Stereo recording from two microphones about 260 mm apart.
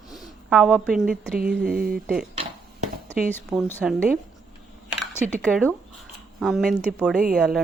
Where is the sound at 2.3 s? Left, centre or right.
Right.